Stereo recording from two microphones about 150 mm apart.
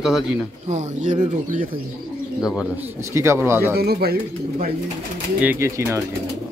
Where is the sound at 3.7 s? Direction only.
90° right.